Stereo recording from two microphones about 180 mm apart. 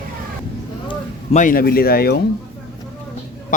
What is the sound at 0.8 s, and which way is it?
Speech, 40° left (ahead or behind).